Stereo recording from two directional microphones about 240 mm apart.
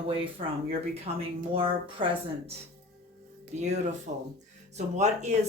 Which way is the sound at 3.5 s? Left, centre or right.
Right.